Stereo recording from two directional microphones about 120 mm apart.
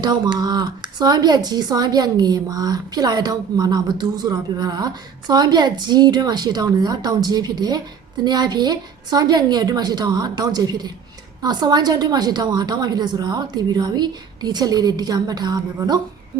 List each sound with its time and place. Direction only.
0.0 s speech: 35° right (ahead or behind)